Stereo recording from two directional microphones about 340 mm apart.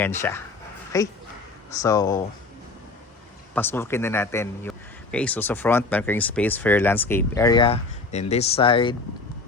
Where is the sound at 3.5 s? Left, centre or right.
Centre.